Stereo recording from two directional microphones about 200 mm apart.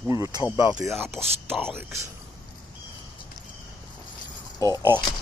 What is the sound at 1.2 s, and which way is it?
Speech, centre (ahead or behind).